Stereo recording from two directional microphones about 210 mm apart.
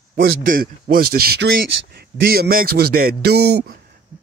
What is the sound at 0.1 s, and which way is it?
Speech, 45° right (ahead or behind).